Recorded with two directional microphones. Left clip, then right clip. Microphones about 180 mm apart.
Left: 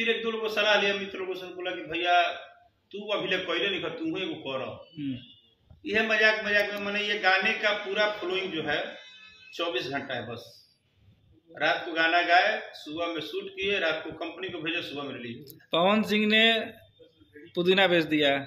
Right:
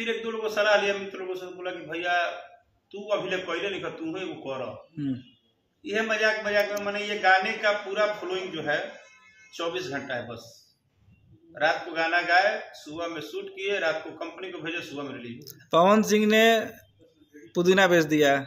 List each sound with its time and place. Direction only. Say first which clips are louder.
0.0 s a man's voice: left 2 dB; 5° right (ahead or behind)
5.9 s a man's voice: left 2 dB; 5° right (ahead or behind)
9.8 s a man's voice: even; 5° right (ahead or behind)
11.5 s a man's voice: right 1 dB; 5° right (ahead or behind)
15.7 s a man's voice: right 4 dB; 45° right (ahead or behind)